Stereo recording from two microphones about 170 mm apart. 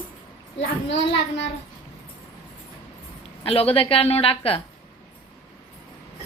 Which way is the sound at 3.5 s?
35° left (ahead or behind).